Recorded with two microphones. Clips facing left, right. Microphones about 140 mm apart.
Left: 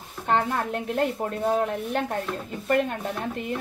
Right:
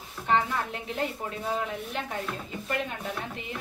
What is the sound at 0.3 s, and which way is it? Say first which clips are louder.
A woman's voice: left 3 dB; 55° left (ahead or behind).